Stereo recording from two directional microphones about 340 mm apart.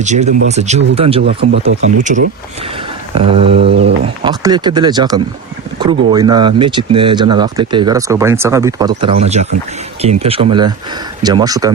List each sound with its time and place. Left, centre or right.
0.0 s speech: centre
3.2 s speech: centre
3.7 s speech: right
4.0 s speech: centre